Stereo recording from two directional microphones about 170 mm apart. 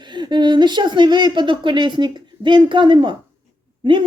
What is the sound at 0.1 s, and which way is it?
Speech, 25° right (ahead or behind).